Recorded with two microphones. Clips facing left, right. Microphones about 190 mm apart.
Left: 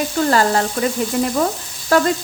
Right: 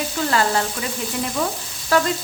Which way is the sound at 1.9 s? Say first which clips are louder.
Left 3 dB; 45° left (ahead or behind).